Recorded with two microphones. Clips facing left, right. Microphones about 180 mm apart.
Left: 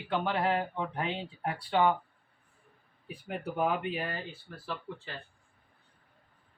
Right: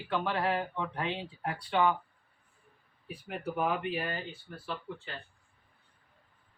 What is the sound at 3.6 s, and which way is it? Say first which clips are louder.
Speech: left 1 dB; 25° left (ahead or behind).